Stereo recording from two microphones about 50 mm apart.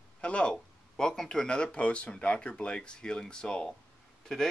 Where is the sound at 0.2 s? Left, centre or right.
Left.